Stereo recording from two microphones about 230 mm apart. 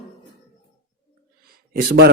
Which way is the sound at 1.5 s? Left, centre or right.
Right.